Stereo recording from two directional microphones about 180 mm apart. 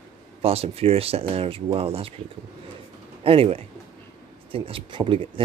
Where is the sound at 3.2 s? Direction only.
30° right (ahead or behind).